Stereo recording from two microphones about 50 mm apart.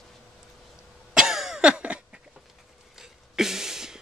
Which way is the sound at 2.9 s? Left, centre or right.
Centre.